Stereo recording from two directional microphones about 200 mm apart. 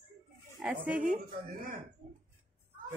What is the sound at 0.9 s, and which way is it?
Speech, 5° right (ahead or behind).